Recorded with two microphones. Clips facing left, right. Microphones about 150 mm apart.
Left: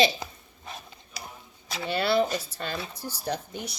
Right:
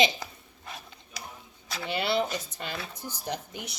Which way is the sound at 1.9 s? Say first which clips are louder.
Left 4 dB; 20° right (ahead or behind).